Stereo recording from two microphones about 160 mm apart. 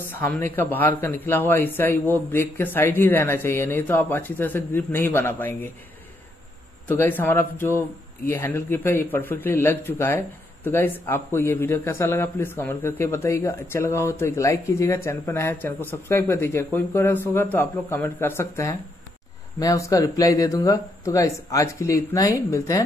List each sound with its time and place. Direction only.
0.1 s a man's voice: 10° left (ahead or behind)
7.0 s a man's voice: 15° left (ahead or behind)